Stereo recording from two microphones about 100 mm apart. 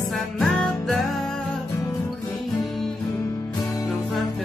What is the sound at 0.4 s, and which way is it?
Music, 5° left (ahead or behind).